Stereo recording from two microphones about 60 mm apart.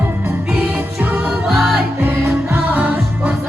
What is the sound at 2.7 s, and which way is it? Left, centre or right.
Music, right.